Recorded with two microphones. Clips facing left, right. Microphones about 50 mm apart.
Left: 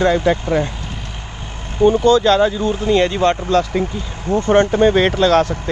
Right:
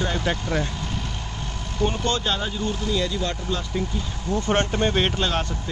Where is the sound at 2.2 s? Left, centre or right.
Left.